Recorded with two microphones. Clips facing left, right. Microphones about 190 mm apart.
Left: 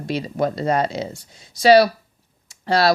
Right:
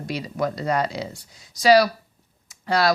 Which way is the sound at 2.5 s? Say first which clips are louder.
Left 3 dB; 30° left (ahead or behind).